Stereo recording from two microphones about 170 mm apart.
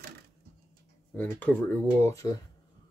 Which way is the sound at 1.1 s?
10° left (ahead or behind).